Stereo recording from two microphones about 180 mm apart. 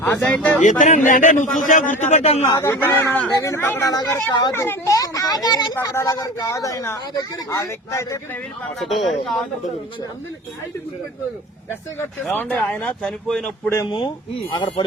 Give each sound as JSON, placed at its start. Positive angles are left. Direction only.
{"t": 0.0, "sound": "speech", "side_deg": 10}
{"t": 0.6, "sound": "a man's voice", "side_deg": 45}
{"t": 2.5, "sound": "speech", "side_deg": 15}
{"t": 9.0, "sound": "speech", "side_deg": 0}
{"t": 12.2, "sound": "speech", "side_deg": 5}
{"t": 14.5, "sound": "speech", "side_deg": 25}